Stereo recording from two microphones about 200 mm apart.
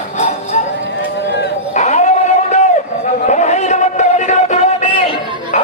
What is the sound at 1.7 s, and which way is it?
Dog, 35° left (ahead or behind).